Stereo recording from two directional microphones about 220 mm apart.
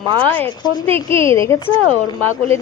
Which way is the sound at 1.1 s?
25° right (ahead or behind).